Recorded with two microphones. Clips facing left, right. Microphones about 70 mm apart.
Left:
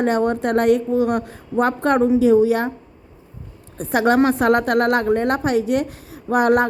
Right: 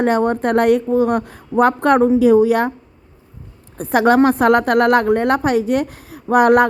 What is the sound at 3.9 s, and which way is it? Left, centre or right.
A woman's voice, right.